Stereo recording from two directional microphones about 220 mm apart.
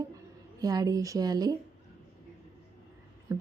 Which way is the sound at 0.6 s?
15° right (ahead or behind).